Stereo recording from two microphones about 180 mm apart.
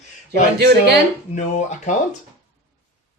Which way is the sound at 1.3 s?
45° left (ahead or behind).